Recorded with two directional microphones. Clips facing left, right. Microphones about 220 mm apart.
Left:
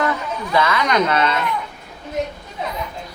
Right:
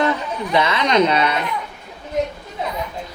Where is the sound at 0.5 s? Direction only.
20° right (ahead or behind).